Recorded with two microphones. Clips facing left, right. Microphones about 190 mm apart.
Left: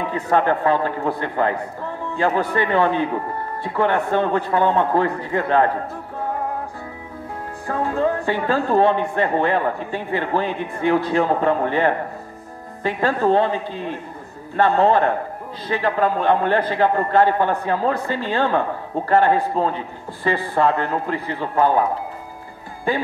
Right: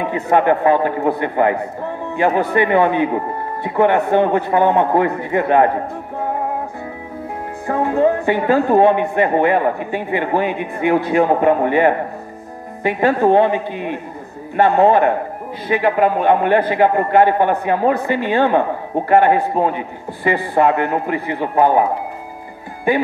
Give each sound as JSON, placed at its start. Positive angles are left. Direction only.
{"t": 0.0, "sound": "a man's voice", "side_deg": -15}
{"t": 7.6, "sound": "a man's voice", "side_deg": -20}